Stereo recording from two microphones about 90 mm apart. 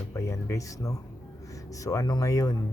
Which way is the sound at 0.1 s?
30° left (ahead or behind).